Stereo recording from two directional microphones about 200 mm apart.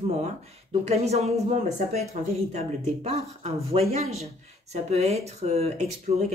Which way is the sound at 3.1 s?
30° right (ahead or behind).